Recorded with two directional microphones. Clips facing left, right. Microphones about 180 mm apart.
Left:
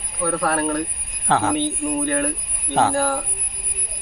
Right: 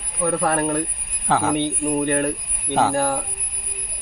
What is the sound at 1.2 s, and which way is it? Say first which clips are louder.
Speech: even; 5° right (ahead or behind).